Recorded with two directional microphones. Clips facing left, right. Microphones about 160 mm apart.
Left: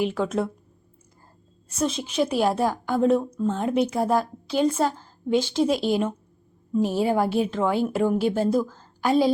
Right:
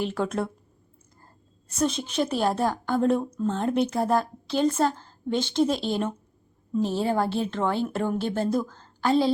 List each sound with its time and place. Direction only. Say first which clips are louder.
0.0 s speech: left 3 dB; centre (ahead or behind)
1.8 s a woman's voice: left 1 dB; centre (ahead or behind)